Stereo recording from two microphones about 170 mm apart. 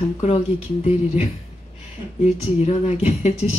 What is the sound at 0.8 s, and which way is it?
Speech, 40° left (ahead or behind).